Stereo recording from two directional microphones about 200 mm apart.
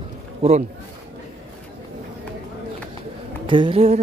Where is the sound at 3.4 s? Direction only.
25° right (ahead or behind).